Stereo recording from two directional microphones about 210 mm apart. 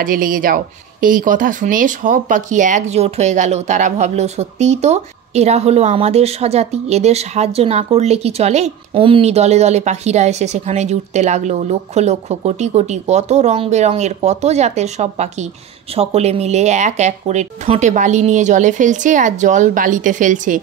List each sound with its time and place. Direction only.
0.0 s speech: 40° right (ahead or behind)